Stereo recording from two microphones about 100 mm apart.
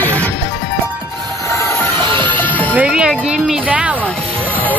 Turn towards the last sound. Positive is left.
turn(degrees=-10)  # may be behind; listen again after turning